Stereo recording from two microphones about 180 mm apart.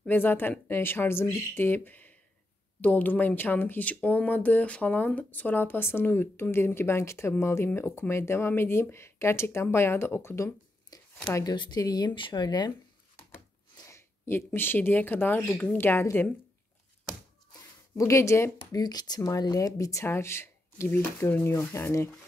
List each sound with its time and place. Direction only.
0.0 s speech: 10° left (ahead or behind)
17.9 s speech: 15° left (ahead or behind)